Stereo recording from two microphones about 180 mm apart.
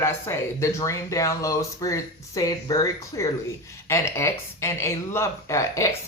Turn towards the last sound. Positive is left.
turn(degrees=15)  # may be behind; listen again after turning